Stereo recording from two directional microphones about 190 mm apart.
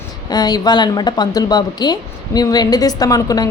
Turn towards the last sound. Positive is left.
turn(degrees=20)  # may be behind; listen again after turning